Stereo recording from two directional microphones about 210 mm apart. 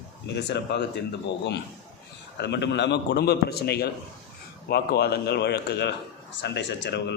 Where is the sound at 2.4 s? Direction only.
55° left (ahead or behind).